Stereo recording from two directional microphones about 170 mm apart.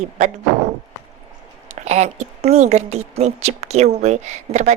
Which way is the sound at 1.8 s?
40° right (ahead or behind).